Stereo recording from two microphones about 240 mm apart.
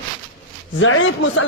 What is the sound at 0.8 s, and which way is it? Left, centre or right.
Speech, left.